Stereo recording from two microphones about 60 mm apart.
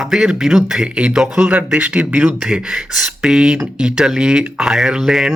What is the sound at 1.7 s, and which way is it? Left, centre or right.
Speech, right.